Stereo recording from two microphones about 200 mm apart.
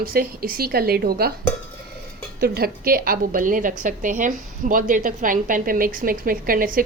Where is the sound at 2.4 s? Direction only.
50° right (ahead or behind).